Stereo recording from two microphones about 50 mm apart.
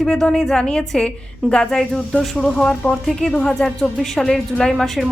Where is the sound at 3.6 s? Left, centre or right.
Centre.